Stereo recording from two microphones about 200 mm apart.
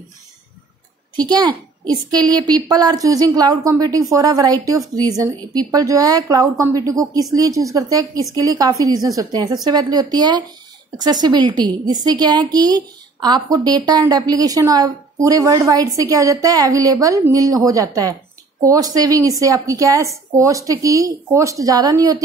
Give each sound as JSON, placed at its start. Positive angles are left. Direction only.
{"t": 1.5, "sound": "a woman's voice", "side_deg": -20}